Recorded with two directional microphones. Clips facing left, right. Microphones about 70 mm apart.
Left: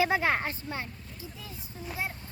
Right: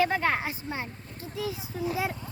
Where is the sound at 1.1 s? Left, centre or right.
Right.